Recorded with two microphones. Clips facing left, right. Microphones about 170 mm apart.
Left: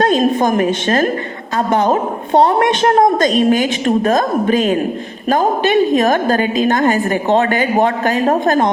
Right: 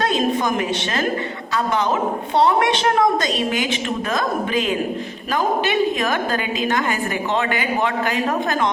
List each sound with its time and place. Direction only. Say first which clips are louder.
0.0 s a woman's voice: left 6 dB; 45° left (ahead or behind)